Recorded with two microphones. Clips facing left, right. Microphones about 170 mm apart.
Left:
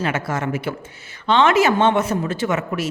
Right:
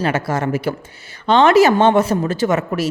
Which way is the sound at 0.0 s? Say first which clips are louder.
Right 4 dB; 35° right (ahead or behind).